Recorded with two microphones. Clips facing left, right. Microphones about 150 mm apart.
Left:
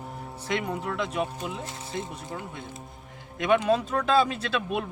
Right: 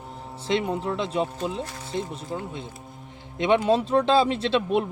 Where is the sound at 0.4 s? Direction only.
25° right (ahead or behind).